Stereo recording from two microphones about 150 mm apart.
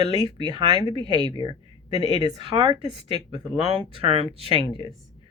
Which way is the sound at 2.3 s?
35° right (ahead or behind).